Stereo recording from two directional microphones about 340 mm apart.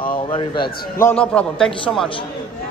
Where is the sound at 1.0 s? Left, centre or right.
Centre.